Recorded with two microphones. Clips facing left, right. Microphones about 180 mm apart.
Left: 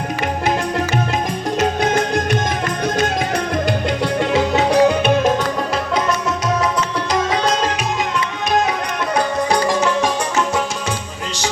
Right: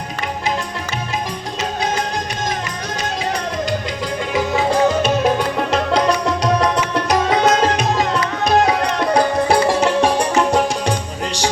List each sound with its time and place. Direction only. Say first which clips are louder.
3.7 s music: left 4 dB; 70° left (ahead or behind)
4.7 s music: left 2 dB; 55° left (ahead or behind)
9.1 s music: right 2 dB; 30° right (ahead or behind)